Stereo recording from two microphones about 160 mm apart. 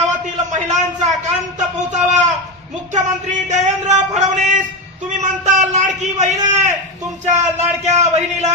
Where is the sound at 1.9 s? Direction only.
50° right (ahead or behind).